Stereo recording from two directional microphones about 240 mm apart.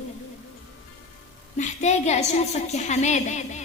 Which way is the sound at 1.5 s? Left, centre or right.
Left.